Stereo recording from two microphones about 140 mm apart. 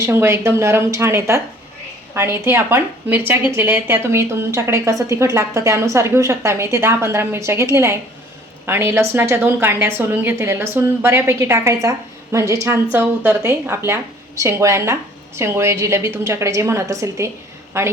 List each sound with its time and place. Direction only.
0.0 s a woman's voice: 20° right (ahead or behind)